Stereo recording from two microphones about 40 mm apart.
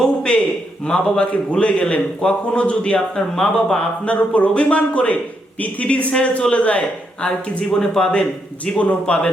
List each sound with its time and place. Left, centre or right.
0.9 s a man's voice: left
3.2 s speech: centre
4.0 s speech: left
7.2 s a man's voice: left
8.8 s speech: left